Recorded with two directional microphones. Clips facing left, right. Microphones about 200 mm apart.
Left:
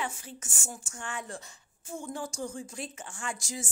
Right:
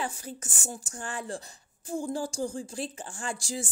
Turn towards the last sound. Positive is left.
turn(degrees=-30)  # may be behind; listen again after turning